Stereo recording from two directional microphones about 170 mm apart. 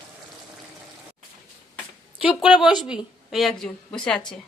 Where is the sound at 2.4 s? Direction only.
5° right (ahead or behind).